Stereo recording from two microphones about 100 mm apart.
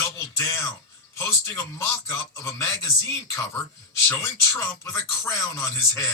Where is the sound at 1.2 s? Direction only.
30° left (ahead or behind).